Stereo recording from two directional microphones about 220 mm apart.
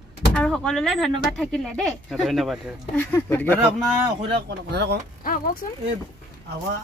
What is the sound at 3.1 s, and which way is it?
Speech, 10° left (ahead or behind).